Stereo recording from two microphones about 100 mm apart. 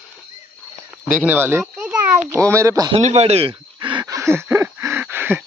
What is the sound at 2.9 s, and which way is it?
Speech, 90° right.